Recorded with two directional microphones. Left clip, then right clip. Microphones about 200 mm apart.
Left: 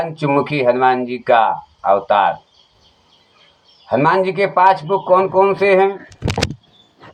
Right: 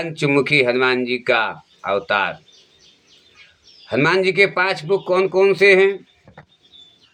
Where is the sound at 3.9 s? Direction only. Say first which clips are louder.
Left 3 dB; 30° right (ahead or behind).